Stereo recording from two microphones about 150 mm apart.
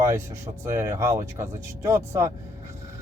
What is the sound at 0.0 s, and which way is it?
Speech, 20° right (ahead or behind).